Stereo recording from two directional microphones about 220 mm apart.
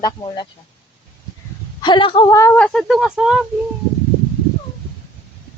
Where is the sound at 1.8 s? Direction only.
20° left (ahead or behind).